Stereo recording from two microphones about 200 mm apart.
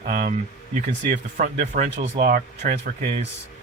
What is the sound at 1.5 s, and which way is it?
Speech, 40° right (ahead or behind).